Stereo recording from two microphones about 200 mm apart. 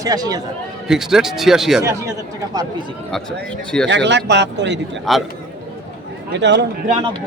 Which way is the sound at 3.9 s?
60° right (ahead or behind).